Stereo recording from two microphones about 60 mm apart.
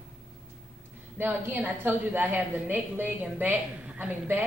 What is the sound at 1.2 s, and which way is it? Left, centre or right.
A woman's voice, right.